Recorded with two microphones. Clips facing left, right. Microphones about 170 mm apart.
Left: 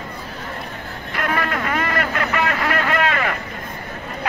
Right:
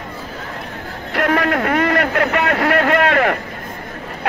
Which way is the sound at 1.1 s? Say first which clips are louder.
Right 6 dB; 70° right (ahead or behind).